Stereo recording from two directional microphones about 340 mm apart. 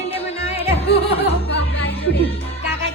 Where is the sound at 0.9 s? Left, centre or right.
Left.